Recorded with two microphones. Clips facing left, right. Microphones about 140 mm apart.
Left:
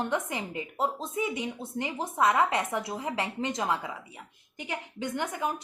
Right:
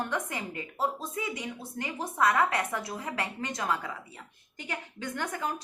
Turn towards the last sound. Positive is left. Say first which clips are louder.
# left 2 dB
turn(degrees=15)  # may be behind; listen again after turning